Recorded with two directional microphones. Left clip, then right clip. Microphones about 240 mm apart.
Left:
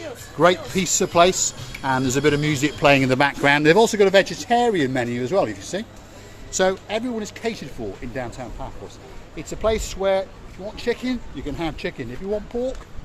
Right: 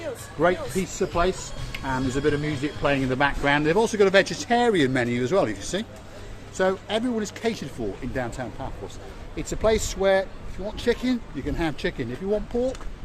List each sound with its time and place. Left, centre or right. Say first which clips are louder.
0.3 s speech: left 5 dB; left; by 5.8 s centre
6.8 s speech: even; centre